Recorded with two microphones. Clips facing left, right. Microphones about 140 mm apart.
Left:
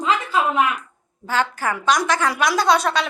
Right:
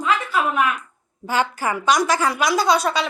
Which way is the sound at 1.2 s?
15° right (ahead or behind).